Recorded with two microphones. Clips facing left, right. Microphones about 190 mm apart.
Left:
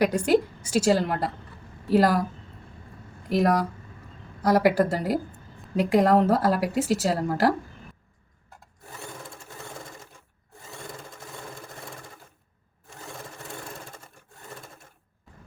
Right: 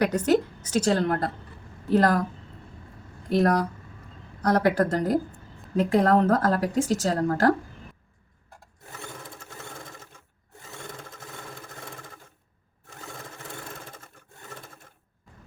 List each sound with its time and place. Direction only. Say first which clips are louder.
0.0 s speech: left 1 dB; 10° left (ahead or behind)
3.2 s speech: even; 5° left (ahead or behind)